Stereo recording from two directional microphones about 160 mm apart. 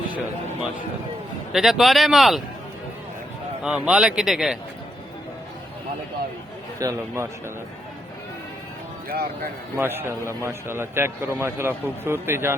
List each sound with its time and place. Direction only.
1.5 s a man's voice: centre (ahead or behind)
3.6 s a man's voice: 5° right (ahead or behind)
6.7 s speech: 20° right (ahead or behind)
9.0 s speech: 70° right (ahead or behind)
9.7 s a man's voice: 15° right (ahead or behind)